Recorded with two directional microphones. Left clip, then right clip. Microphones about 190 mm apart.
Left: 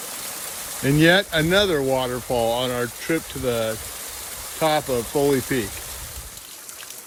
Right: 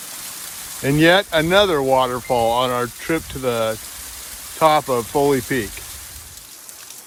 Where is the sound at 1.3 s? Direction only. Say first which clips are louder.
Right 4 dB; 55° right (ahead or behind).